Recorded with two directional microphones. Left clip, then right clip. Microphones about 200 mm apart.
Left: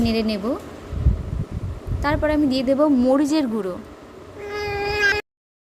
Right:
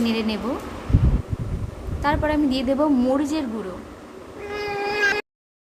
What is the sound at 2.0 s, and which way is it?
A woman's voice, 20° left (ahead or behind).